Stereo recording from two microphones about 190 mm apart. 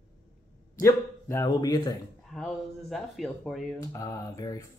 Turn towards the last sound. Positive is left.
turn(degrees=15)  # may be behind; listen again after turning